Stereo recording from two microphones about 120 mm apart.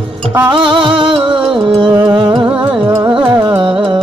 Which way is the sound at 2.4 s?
15° right (ahead or behind).